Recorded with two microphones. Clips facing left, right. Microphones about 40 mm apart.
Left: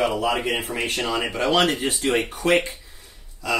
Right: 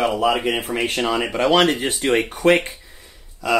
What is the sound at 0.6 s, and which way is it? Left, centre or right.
Speech, right.